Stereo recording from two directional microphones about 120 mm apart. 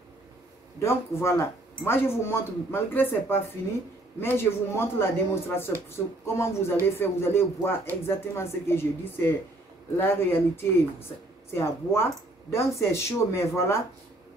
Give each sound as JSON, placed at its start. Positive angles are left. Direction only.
{"t": 0.7, "sound": "speech", "side_deg": 20}